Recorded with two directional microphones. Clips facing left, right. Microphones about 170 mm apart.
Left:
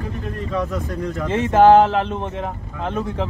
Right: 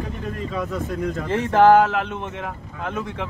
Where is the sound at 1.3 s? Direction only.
20° left (ahead or behind); by 3.2 s 35° left (ahead or behind).